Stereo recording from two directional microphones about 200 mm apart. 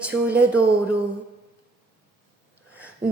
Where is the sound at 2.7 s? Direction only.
5° right (ahead or behind).